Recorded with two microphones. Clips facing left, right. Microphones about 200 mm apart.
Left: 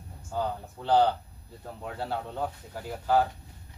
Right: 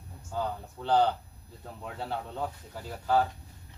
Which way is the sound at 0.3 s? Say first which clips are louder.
Left 2 dB; 15° left (ahead or behind).